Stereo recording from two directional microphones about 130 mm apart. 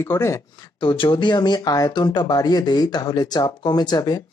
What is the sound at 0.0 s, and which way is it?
Speech, 20° left (ahead or behind).